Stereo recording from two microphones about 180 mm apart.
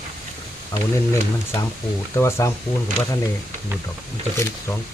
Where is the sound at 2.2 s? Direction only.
15° left (ahead or behind).